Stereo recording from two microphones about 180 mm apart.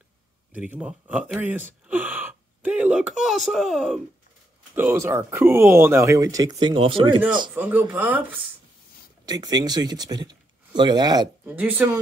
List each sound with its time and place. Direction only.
0.5 s speech: 10° right (ahead or behind)
4.7 s speech: 15° right (ahead or behind); by 7.2 s 30° right (ahead or behind)
7.5 s speech: 10° right (ahead or behind)
9.2 s speech: 20° right (ahead or behind)
11.4 s speech: 10° right (ahead or behind)